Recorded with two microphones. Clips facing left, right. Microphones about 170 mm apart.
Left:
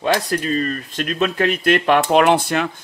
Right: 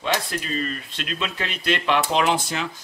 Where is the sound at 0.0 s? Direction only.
45° left (ahead or behind).